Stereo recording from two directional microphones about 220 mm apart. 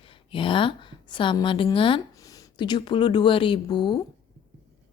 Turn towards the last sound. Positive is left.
turn(degrees=20)  # may be behind; listen again after turning